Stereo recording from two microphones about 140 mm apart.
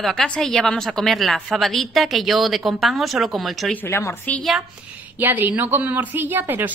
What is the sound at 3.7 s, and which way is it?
Speech, 20° left (ahead or behind).